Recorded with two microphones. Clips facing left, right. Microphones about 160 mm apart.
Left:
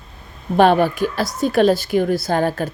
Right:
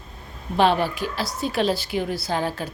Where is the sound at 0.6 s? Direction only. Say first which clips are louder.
Left 6 dB; 50° left (ahead or behind).